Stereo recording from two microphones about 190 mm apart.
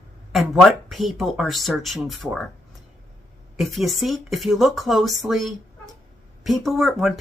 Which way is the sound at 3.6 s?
Centre (ahead or behind).